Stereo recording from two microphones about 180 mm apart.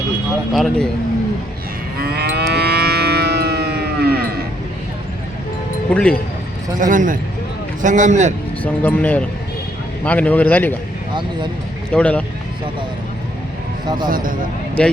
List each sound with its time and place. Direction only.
0.5 s speech: centre (ahead or behind)
2.0 s livestock: 60° right (ahead or behind)
5.9 s speech: 5° left (ahead or behind)
6.7 s a man's voice: 45° right (ahead or behind)
8.6 s a man's voice: 10° left (ahead or behind)
11.9 s a man's voice: 5° left (ahead or behind)
14.1 s a man's voice: 50° right (ahead or behind)
14.8 s a man's voice: 5° left (ahead or behind)